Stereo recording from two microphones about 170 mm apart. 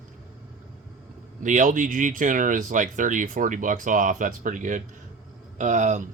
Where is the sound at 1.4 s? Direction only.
50° right (ahead or behind).